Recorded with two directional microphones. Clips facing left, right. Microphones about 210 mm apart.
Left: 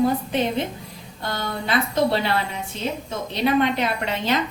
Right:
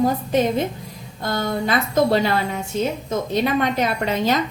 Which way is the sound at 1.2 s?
45° right (ahead or behind).